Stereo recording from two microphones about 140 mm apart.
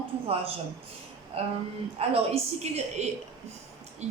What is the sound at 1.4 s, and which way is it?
A woman's voice, 45° right (ahead or behind).